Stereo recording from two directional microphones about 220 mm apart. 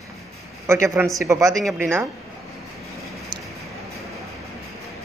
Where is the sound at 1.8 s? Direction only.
10° right (ahead or behind).